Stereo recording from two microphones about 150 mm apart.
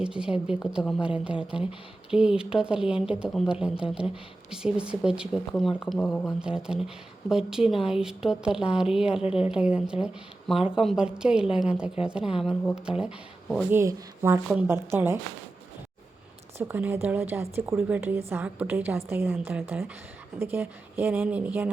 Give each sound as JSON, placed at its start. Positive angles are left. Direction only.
{"t": 0.0, "sound": "speech", "side_deg": -5}
{"t": 9.2, "sound": "a woman's voice", "side_deg": 40}
{"t": 9.6, "sound": "a woman's voice", "side_deg": -5}
{"t": 13.7, "sound": "a woman's voice", "side_deg": -15}
{"t": 16.6, "sound": "a woman's voice", "side_deg": -10}